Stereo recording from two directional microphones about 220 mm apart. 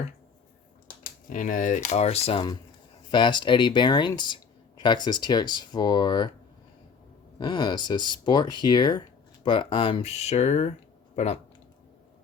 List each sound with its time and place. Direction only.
0.9 s speech: 35° left (ahead or behind); by 6.3 s 20° left (ahead or behind)
7.3 s speech: 20° left (ahead or behind)